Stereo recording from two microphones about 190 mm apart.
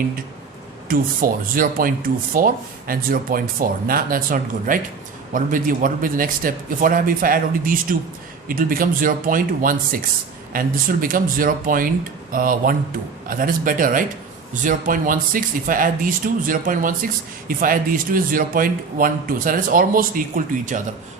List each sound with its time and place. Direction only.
0.9 s speech: 50° right (ahead or behind)